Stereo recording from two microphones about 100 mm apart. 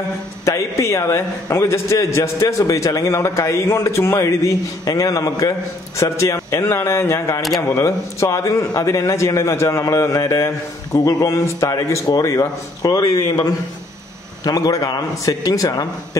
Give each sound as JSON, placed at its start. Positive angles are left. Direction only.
{"t": 0.5, "sound": "a man's voice", "side_deg": 30}